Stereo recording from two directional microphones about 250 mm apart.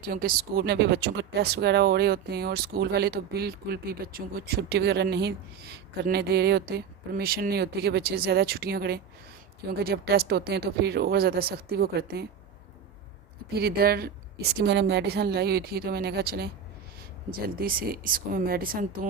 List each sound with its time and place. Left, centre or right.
0.0 s speech: right
13.5 s speech: right
17.6 s speech: right